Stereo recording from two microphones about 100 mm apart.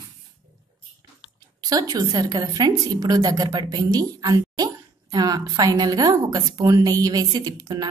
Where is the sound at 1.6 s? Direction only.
40° right (ahead or behind).